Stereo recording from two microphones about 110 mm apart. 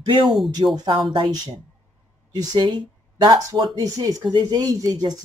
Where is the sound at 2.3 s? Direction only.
35° right (ahead or behind).